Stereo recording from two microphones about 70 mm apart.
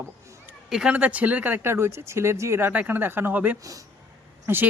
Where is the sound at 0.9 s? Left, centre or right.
Right.